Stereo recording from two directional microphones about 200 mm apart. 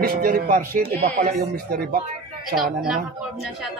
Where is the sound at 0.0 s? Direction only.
50° right (ahead or behind).